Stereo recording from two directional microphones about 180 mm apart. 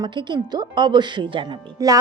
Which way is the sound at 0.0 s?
25° right (ahead or behind).